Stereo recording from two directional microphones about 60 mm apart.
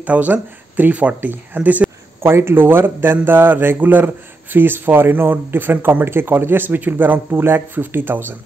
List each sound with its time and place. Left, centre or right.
0.0 s speech: right
2.2 s speech: right